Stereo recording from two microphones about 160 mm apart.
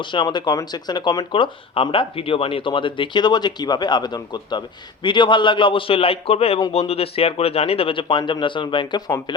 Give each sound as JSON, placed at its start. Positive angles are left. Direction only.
{"t": 0.0, "sound": "speech", "side_deg": 30}